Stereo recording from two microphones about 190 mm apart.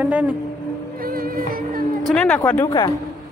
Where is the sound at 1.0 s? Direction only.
50° right (ahead or behind).